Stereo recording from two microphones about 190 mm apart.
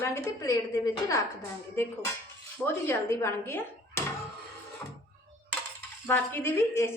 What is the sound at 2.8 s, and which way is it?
A woman's voice, 15° left (ahead or behind).